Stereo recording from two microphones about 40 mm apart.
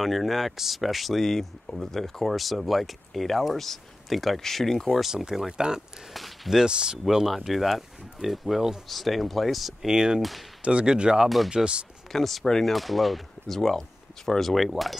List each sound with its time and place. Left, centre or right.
0.0 s speech: centre
5.0 s speech: centre
6.1 s speech: centre
6.5 s speech: centre
7.2 s speech: centre
9.8 s speech: centre
10.6 s speech: right
11.2 s speech: centre
11.5 s speech: right
12.1 s speech: centre
12.7 s speech: centre